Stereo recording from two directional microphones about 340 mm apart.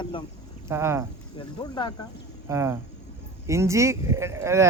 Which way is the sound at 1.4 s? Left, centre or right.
Centre.